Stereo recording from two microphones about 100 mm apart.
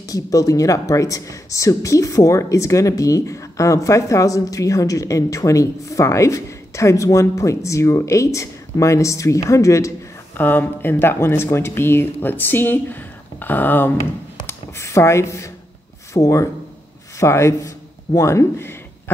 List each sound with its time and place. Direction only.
0.1 s speech: 35° left (ahead or behind)
10.3 s speech: 20° left (ahead or behind)
14.4 s a sound: 30° left (ahead or behind)
16.1 s speech: 30° left (ahead or behind)